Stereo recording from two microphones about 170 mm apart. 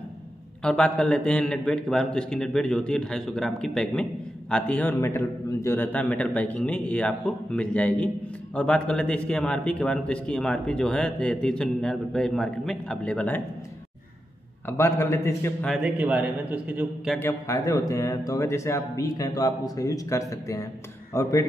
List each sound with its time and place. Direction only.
0.6 s a man's voice: 5° left (ahead or behind)
14.7 s a man's voice: 15° left (ahead or behind)
15.7 s a man's voice: 5° right (ahead or behind)
17.2 s a man's voice: 15° left (ahead or behind)